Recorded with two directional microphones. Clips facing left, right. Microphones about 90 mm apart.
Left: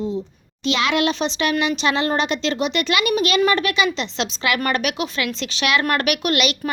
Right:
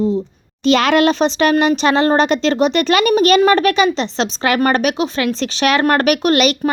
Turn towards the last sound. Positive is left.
turn(degrees=-40)  # may be behind; listen again after turning